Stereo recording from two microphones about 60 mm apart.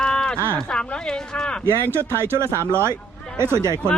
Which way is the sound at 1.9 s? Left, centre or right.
Right.